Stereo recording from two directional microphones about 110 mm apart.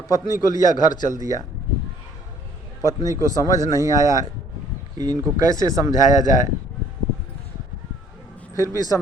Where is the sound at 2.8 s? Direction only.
30° right (ahead or behind).